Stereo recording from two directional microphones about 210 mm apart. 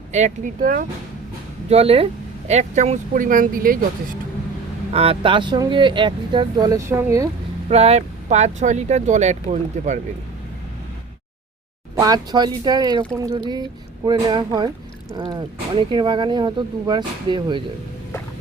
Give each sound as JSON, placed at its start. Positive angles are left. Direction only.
{"t": 0.1, "sound": "speech", "side_deg": -35}
{"t": 1.7, "sound": "speech", "side_deg": -30}
{"t": 4.9, "sound": "speech", "side_deg": -25}
{"t": 7.7, "sound": "speech", "side_deg": -30}
{"t": 11.9, "sound": "speech", "side_deg": -20}